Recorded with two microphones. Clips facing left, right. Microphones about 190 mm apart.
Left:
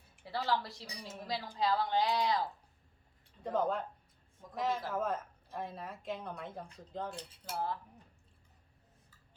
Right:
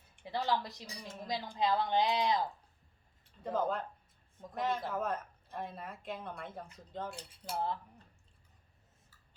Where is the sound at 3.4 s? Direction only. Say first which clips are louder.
Left 1 dB; centre (ahead or behind).